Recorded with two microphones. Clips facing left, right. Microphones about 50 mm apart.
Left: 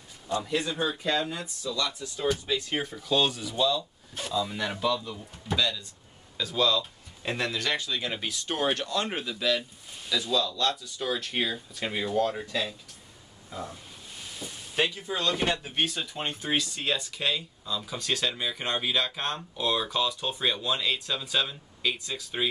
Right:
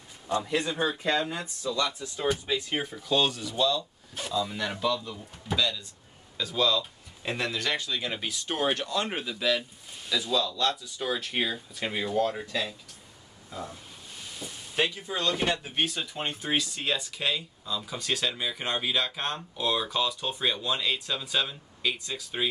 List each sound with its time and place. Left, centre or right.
0.3 s speech: right; by 13.7 s centre
14.4 s a sound: centre
15.0 s speech: centre